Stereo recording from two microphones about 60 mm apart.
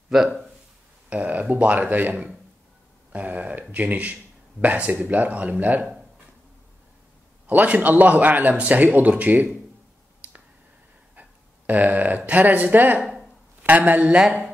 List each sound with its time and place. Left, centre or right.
1.1 s a man's voice: right
7.4 s a man's voice: right
11.1 s a sound: right
12.3 s a man's voice: right
13.0 s a sound: centre
13.6 s speech: right